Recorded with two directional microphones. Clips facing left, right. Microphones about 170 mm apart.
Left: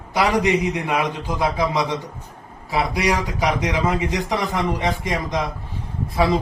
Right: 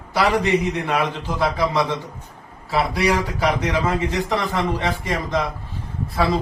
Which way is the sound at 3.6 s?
15° left (ahead or behind).